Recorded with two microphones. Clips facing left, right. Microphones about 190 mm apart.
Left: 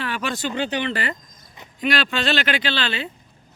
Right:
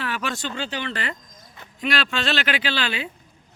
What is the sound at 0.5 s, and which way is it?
Speech, 20° left (ahead or behind).